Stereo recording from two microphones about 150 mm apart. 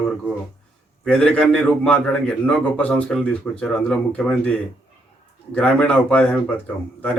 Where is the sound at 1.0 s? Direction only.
5° left (ahead or behind).